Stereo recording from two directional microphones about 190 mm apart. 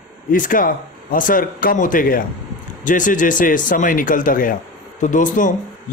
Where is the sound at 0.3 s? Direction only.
45° left (ahead or behind).